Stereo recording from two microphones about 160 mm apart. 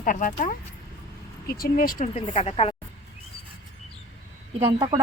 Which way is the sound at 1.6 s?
65° left (ahead or behind).